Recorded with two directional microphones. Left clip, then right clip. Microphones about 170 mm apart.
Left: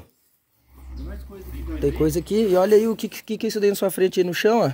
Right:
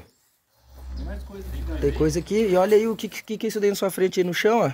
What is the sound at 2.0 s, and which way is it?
Speech, 35° left (ahead or behind).